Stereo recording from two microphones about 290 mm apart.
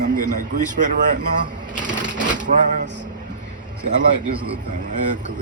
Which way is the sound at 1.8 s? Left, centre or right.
Right.